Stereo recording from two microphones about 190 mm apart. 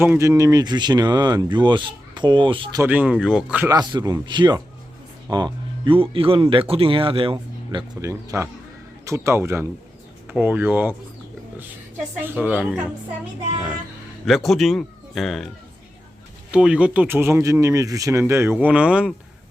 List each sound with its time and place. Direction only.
0.0 s speech: 15° right (ahead or behind)
2.8 s speech: 10° right (ahead or behind)
3.7 s speech: 20° right (ahead or behind)
12.2 s speech: 10° right (ahead or behind)
14.3 s speech: centre (ahead or behind)